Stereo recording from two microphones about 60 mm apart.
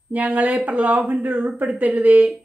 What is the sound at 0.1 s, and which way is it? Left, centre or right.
Speech, right.